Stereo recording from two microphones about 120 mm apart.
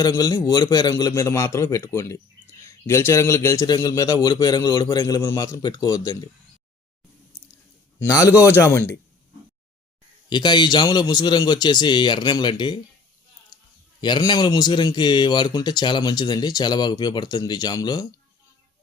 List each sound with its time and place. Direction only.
0.0 s a man's voice: 30° left (ahead or behind)
7.9 s a man's voice: 25° left (ahead or behind)
10.2 s speech: 40° left (ahead or behind)
13.5 s a sound: 35° left (ahead or behind)
14.0 s speech: 40° left (ahead or behind)